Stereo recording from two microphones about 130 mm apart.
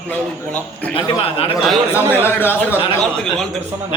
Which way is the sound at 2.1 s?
15° left (ahead or behind).